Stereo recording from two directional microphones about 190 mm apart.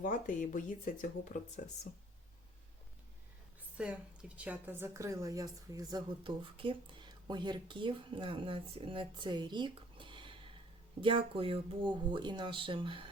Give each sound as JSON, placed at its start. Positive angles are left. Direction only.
{"t": 0.0, "sound": "speech", "side_deg": 45}
{"t": 3.8, "sound": "a woman's voice", "side_deg": -5}